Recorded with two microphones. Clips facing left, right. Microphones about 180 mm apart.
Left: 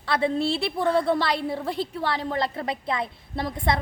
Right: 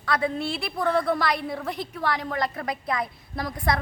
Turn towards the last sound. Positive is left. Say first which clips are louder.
# left 1 dB
turn(degrees=25)  # may be behind; listen again after turning